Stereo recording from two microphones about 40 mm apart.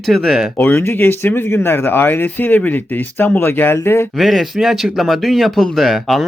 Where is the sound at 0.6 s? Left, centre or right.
Left.